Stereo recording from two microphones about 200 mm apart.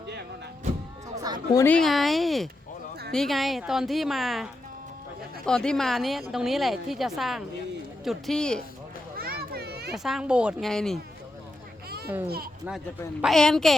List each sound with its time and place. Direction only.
1.1 s a sound: 20° right (ahead or behind)
1.5 s a woman's voice: 10° left (ahead or behind)
5.5 s a woman's voice: 5° left (ahead or behind)
9.1 s children playing: 50° right (ahead or behind)
9.9 s a woman's voice: centre (ahead or behind)
11.9 s children playing: 50° right (ahead or behind)
13.2 s a woman's voice: centre (ahead or behind)